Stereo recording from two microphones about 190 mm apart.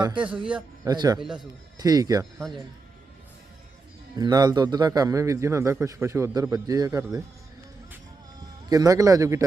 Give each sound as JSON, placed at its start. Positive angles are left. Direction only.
{"t": 0.2, "sound": "a man's voice", "side_deg": -5}
{"t": 0.9, "sound": "speech", "side_deg": -20}
{"t": 4.2, "sound": "a man's voice", "side_deg": -20}
{"t": 8.7, "sound": "a man's voice", "side_deg": -20}